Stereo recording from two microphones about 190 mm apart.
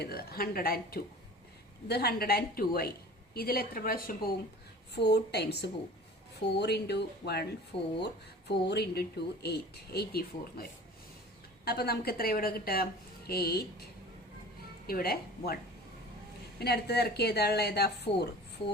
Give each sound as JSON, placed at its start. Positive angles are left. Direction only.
{"t": 0.0, "sound": "a woman's voice", "side_deg": 55}
{"t": 4.9, "sound": "speech", "side_deg": 60}
{"t": 14.8, "sound": "a woman's voice", "side_deg": 50}
{"t": 16.6, "sound": "speech", "side_deg": 55}